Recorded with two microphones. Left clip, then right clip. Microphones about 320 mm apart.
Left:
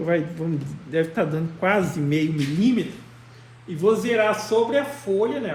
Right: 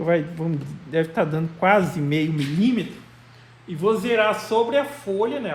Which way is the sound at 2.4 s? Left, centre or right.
Centre.